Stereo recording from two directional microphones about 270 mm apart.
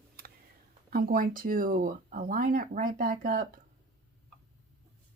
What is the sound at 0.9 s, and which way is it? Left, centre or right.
Speech, right.